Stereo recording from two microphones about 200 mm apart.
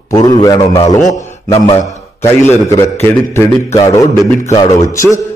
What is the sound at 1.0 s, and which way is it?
Speech, 30° left (ahead or behind).